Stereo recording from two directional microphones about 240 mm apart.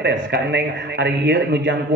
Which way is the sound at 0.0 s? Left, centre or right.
Right.